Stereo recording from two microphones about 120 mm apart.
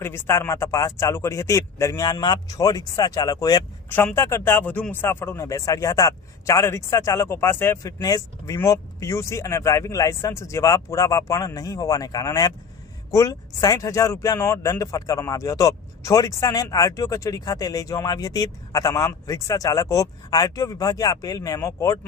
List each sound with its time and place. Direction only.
0.0 s speech: 20° left (ahead or behind)
3.8 s speech: 15° left (ahead or behind)